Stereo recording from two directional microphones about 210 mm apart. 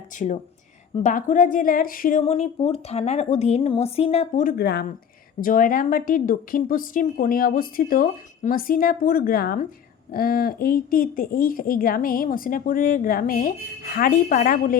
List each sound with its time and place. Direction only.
0.2 s a woman's voice: 35° left (ahead or behind)